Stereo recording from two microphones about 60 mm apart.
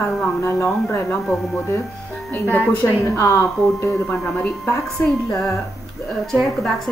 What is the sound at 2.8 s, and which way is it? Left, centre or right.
Speech, left.